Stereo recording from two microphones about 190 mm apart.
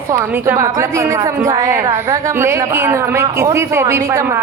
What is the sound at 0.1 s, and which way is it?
A woman's voice, 10° right (ahead or behind).